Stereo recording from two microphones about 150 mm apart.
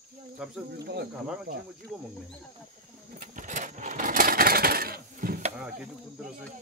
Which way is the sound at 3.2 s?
60° right (ahead or behind).